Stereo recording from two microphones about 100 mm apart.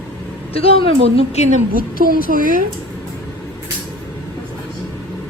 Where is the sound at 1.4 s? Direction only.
90° left.